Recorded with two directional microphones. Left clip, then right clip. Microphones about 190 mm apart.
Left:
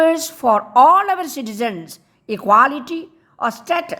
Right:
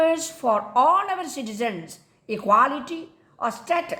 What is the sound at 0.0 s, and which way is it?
A woman's voice, 25° left (ahead or behind).